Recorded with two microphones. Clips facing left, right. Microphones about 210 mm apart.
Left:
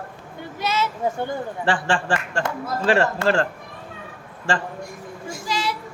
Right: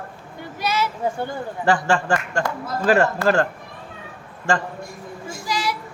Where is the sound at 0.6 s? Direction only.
25° left (ahead or behind).